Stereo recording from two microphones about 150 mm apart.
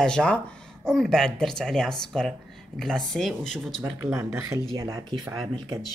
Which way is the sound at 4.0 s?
20° right (ahead or behind).